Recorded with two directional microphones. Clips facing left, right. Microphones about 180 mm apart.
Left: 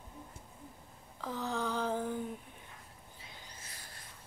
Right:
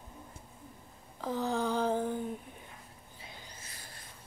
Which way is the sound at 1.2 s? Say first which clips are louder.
Right 4 dB; 30° right (ahead or behind).